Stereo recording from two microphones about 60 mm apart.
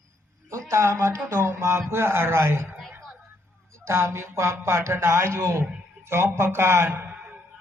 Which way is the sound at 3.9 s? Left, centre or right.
Right.